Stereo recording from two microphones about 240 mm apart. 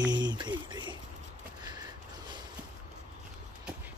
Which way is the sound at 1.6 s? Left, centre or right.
Centre.